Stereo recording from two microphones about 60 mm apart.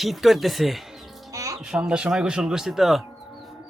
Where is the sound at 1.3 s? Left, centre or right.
Right.